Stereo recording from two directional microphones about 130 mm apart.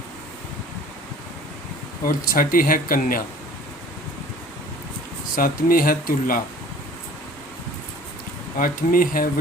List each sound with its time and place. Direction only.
2.0 s speech: 90° left
5.4 s speech: 90° left
8.5 s speech: 90° left